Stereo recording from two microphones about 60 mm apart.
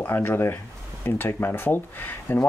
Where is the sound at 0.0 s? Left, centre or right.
Left.